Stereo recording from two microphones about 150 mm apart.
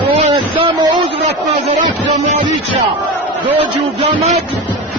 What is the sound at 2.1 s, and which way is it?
Speech, 50° right (ahead or behind).